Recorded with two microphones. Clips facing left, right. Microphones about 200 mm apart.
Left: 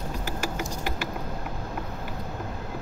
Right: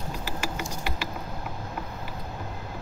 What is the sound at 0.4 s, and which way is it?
Mechanisms, 45° left (ahead or behind).